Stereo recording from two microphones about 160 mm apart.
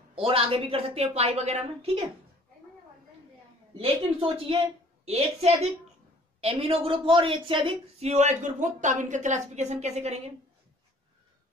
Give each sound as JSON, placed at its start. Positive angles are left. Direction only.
{"t": 0.1, "sound": "a woman's voice", "side_deg": -35}
{"t": 3.7, "sound": "a woman's voice", "side_deg": -35}